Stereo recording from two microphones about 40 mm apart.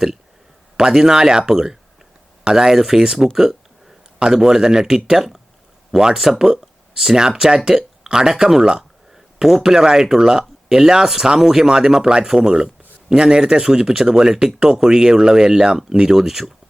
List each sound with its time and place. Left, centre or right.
0.8 s speech: centre